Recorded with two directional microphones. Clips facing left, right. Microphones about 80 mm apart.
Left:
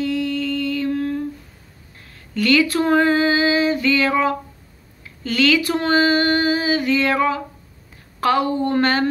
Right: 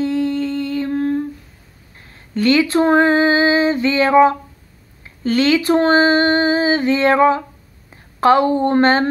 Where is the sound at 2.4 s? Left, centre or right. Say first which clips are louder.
Right 3 dB; right.